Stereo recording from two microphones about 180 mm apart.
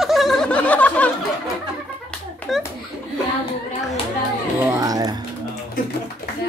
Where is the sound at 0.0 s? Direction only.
Centre (ahead or behind).